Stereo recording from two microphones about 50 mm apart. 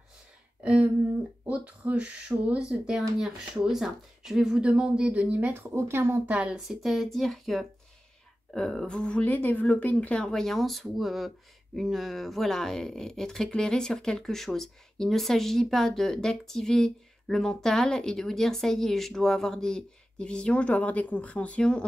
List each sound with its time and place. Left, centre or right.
0.6 s a sound: right
1.5 s speech: right; by 4.6 s centre
4.6 s speech: centre
5.1 s speech: right
5.5 s speech: right
6.2 s speech: right
6.5 s speech: centre
8.5 s speech: centre
9.2 s speech: left
10.2 s speech: centre